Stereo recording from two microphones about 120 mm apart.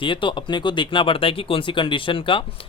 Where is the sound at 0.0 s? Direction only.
45° left (ahead or behind).